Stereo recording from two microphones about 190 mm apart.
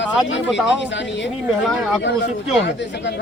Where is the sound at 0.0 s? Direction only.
75° left (ahead or behind).